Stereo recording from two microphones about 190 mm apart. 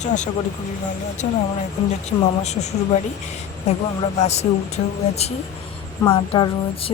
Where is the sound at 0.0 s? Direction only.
40° left (ahead or behind).